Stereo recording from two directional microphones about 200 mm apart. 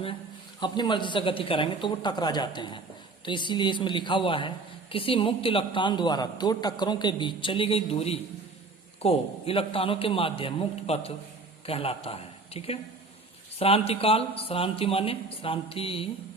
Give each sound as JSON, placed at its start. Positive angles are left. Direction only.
{"t": 0.6, "sound": "a woman's voice", "side_deg": 25}